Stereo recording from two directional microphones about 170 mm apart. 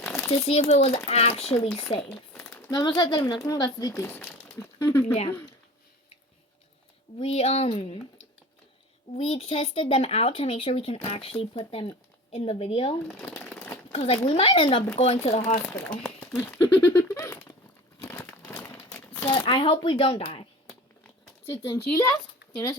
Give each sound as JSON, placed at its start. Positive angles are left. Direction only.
{"t": 0.3, "sound": "speech", "side_deg": 35}
{"t": 2.0, "sound": "crumpling", "side_deg": 5}
{"t": 2.6, "sound": "speech", "side_deg": 20}
{"t": 7.2, "sound": "speech", "side_deg": 35}
{"t": 9.1, "sound": "speech", "side_deg": 35}
{"t": 13.1, "sound": "shuffling cards", "side_deg": 5}
{"t": 13.9, "sound": "speech", "side_deg": 35}
{"t": 16.0, "sound": "a sound", "side_deg": 10}
{"t": 18.0, "sound": "crumpling", "side_deg": 10}
{"t": 19.2, "sound": "speech", "side_deg": 30}
{"t": 21.5, "sound": "speech", "side_deg": 15}